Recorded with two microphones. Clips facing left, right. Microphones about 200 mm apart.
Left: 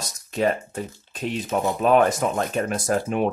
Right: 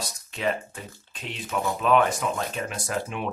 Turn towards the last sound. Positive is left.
turn(degrees=45)  # may be behind; listen again after turning